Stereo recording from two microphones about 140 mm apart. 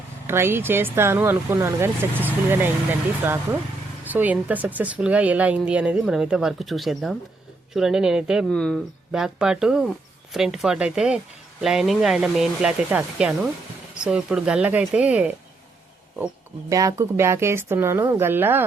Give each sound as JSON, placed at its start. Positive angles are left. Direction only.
{"t": 0.3, "sound": "speech", "side_deg": -15}
{"t": 4.0, "sound": "speech", "side_deg": -10}
{"t": 16.6, "sound": "speech", "side_deg": -25}